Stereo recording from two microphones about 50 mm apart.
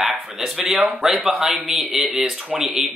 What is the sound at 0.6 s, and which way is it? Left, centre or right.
Speech, right.